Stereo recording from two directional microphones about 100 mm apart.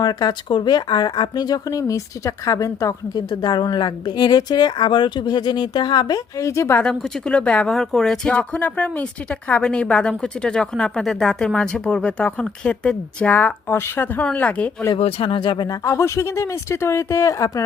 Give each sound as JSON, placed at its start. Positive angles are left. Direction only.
{"t": 0.0, "sound": "speech", "side_deg": 45}
{"t": 6.7, "sound": "speech", "side_deg": 10}
{"t": 14.9, "sound": "speech", "side_deg": 75}